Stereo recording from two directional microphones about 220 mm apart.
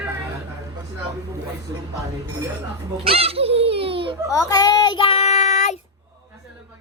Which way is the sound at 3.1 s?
25° right (ahead or behind).